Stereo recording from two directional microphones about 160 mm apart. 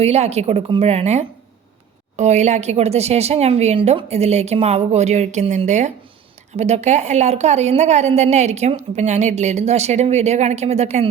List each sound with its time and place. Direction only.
0.0 s a woman's voice: 40° right (ahead or behind)